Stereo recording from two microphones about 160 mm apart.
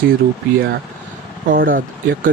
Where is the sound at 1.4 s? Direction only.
60° right (ahead or behind).